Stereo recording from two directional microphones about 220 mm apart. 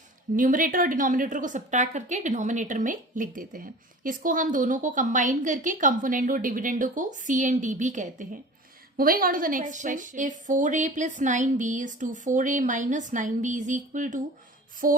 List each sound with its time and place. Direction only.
0.3 s a woman's voice: 40° right (ahead or behind)